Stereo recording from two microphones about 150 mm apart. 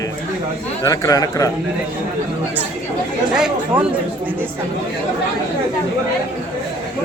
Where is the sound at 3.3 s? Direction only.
5° right (ahead or behind).